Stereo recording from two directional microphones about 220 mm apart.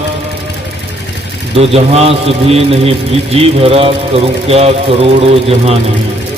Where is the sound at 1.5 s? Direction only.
25° right (ahead or behind).